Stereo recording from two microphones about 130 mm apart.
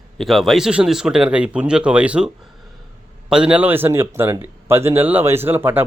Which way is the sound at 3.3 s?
10° right (ahead or behind).